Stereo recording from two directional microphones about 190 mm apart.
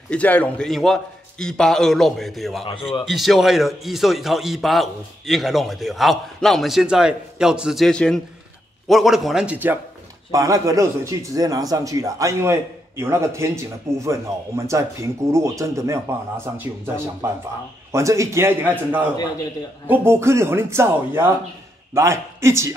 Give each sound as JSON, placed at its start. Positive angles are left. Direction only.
{"t": 0.1, "sound": "a man's voice", "side_deg": 10}